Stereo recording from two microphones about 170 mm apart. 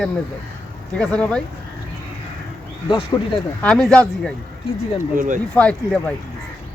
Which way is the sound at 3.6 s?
5° left (ahead or behind).